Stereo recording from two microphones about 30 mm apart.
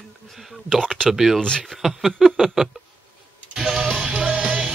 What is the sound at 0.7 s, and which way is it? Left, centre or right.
Speech, centre.